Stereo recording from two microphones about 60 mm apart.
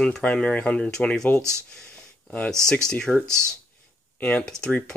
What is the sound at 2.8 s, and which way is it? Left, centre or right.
Speech, centre.